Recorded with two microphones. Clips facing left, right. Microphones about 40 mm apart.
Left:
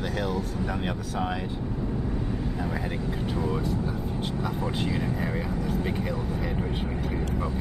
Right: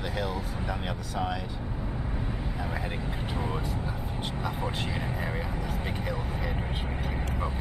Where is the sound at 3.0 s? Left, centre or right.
Centre.